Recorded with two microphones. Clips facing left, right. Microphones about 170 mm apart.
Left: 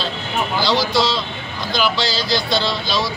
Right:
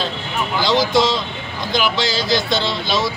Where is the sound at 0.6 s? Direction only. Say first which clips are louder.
Right 3 dB; 20° right (ahead or behind).